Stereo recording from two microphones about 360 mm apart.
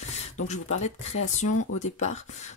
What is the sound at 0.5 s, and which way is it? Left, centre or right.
Speech, centre.